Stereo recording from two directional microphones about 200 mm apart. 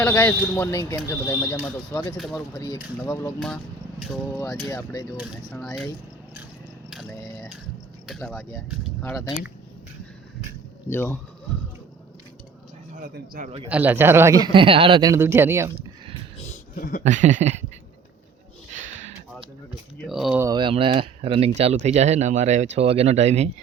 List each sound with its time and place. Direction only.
0.0 s speech: 10° left (ahead or behind)
2.1 s speech: centre (ahead or behind)
2.6 s speech: 20° left (ahead or behind)
4.7 s speech: 15° left (ahead or behind)
5.1 s speech: 5° right (ahead or behind)
8.0 s speech: centre (ahead or behind)
10.8 s speech: 10° left (ahead or behind)
13.0 s speech: 45° right (ahead or behind)
13.7 s speech: 10° right (ahead or behind)
17.0 s speech: 35° right (ahead or behind)
20.1 s speech: centre (ahead or behind)
20.4 s speech: 20° right (ahead or behind)